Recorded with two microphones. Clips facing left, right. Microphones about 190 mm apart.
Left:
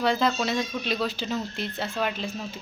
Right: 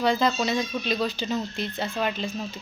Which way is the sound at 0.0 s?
Centre (ahead or behind).